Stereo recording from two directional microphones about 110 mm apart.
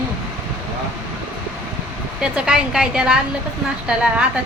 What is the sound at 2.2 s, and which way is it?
A woman's voice, 5° right (ahead or behind).